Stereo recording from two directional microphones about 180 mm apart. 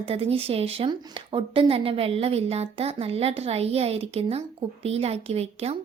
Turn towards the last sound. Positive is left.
turn(degrees=-35)  # may be behind; listen again after turning